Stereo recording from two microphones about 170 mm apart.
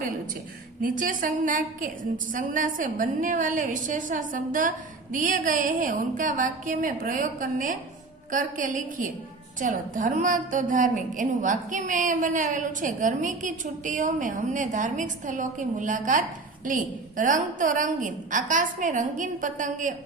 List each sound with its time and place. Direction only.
0.8 s a woman's voice: 55° right (ahead or behind)